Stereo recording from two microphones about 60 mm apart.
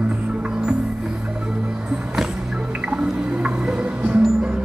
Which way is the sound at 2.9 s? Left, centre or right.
Centre.